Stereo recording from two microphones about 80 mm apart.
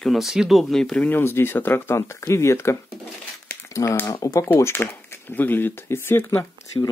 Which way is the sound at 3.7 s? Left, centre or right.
Left.